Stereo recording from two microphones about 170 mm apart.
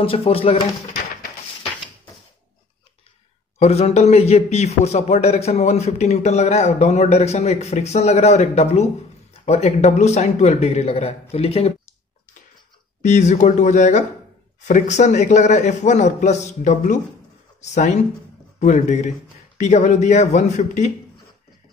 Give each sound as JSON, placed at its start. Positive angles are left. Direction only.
{"t": 0.0, "sound": "a man's voice", "side_deg": 35}
{"t": 3.5, "sound": "a man's voice", "side_deg": 40}
{"t": 13.0, "sound": "speech", "side_deg": 45}